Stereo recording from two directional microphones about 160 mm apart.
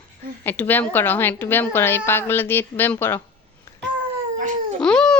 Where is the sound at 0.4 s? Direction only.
10° left (ahead or behind).